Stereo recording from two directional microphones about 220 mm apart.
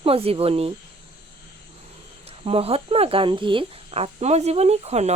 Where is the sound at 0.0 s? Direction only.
25° right (ahead or behind).